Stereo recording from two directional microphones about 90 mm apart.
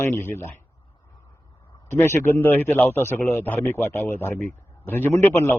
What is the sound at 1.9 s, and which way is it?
A man's voice, 25° left (ahead or behind).